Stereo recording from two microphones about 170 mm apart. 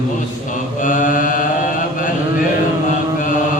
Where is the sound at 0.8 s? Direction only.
50° left (ahead or behind).